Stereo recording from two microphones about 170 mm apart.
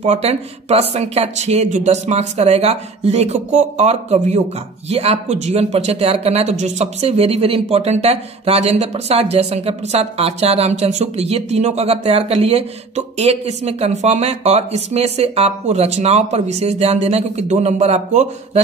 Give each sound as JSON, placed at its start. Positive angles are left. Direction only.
{"t": 0.0, "sound": "speech", "side_deg": -40}